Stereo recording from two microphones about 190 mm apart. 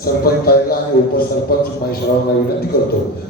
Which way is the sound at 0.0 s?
55° left (ahead or behind).